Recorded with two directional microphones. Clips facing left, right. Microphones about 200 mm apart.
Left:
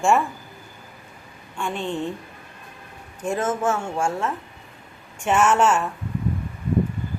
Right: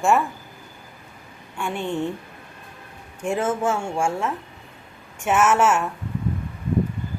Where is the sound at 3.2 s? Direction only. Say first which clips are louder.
Right 1 dB; 10° right (ahead or behind).